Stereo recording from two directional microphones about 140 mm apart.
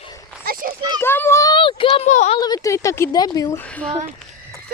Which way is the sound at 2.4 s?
25° left (ahead or behind).